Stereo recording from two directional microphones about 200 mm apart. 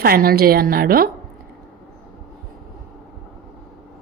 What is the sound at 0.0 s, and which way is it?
Speech, 50° right (ahead or behind).